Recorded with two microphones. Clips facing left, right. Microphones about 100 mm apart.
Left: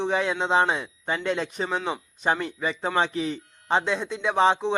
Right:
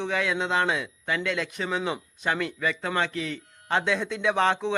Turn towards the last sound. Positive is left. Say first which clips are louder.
# left 2 dB
turn(degrees=20)  # may be behind; listen again after turning